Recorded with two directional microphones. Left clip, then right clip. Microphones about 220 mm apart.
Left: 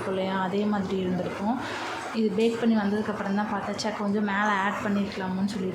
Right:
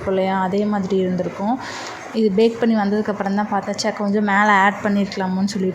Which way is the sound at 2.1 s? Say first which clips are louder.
Right 9 dB; 30° right (ahead or behind).